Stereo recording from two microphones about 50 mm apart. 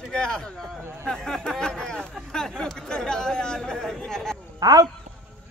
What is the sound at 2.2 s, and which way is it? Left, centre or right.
Chatter, centre.